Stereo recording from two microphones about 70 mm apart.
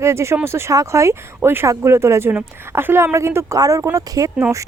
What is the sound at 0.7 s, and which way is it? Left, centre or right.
Speech, right.